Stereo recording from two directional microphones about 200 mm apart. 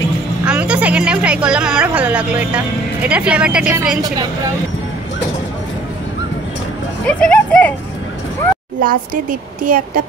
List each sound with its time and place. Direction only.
0.5 s a woman's voice: 5° right (ahead or behind)
7.1 s speech: 5° left (ahead or behind)
8.8 s a woman's voice: 40° right (ahead or behind)